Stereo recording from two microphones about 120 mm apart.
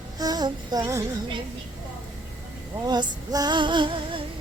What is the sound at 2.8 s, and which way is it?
Female singing, 35° right (ahead or behind).